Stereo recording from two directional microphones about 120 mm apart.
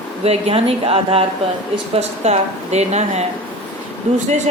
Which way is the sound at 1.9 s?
65° right (ahead or behind).